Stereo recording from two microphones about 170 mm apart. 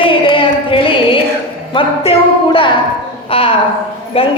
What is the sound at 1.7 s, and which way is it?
A woman's voice, 30° left (ahead or behind).